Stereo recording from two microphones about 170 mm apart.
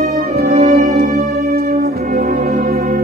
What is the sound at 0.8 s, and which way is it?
Music, 40° right (ahead or behind).